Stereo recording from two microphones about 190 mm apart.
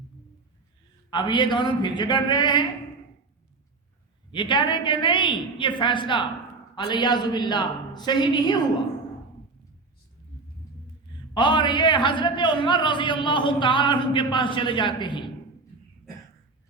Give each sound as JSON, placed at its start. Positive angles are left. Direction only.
{"t": 1.1, "sound": "a man's voice", "side_deg": 25}
{"t": 4.3, "sound": "a man's voice", "side_deg": 25}
{"t": 11.3, "sound": "a man's voice", "side_deg": 25}